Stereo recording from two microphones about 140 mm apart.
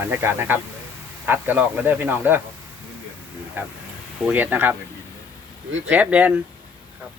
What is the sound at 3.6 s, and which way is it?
Speech, 15° right (ahead or behind).